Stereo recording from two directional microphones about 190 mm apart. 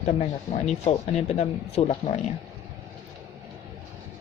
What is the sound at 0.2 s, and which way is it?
Speech, 35° left (ahead or behind).